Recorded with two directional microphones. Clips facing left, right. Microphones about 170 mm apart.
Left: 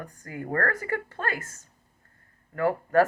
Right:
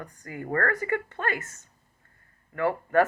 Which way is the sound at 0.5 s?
45° left (ahead or behind).